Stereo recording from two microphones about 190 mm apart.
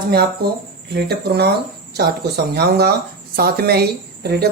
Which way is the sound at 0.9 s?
60° right (ahead or behind).